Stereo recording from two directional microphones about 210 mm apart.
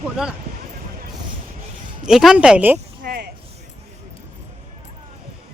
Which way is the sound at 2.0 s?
Centre (ahead or behind).